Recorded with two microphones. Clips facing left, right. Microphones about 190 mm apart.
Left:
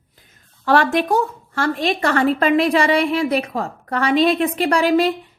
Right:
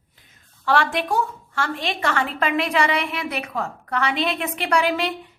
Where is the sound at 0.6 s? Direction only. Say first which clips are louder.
Left 5 dB; 40° left (ahead or behind).